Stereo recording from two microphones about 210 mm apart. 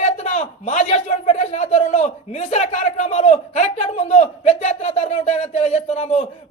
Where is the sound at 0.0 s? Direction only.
35° left (ahead or behind).